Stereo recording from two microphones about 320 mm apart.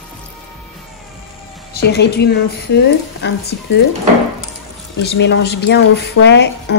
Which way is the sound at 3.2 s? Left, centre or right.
Left.